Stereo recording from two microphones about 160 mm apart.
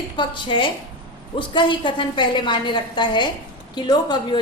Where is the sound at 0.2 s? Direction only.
30° left (ahead or behind).